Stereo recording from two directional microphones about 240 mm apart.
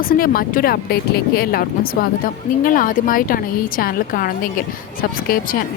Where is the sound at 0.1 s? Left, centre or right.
Left.